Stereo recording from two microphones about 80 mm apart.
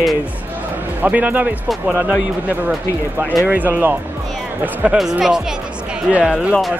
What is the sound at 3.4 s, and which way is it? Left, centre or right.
Speech, right.